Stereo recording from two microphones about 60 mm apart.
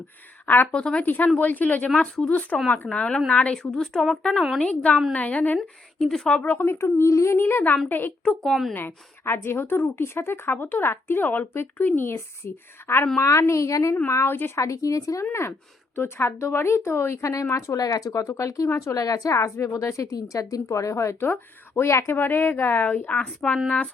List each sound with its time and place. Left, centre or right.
0.4 s a woman's voice: left
0.7 s speech: centre
1.0 s speech: left
3.6 s speech: centre
4.6 s speech: left
6.0 s speech: centre
6.4 s speech: left
8.2 s speech: centre
8.7 s speech: left
13.1 s speech: left
15.2 s speech: left; by 23.9 s centre